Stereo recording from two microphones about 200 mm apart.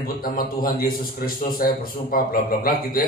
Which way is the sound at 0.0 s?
45° left (ahead or behind).